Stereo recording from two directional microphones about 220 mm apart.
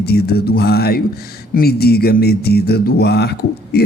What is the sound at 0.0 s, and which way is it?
Speech, 45° left (ahead or behind).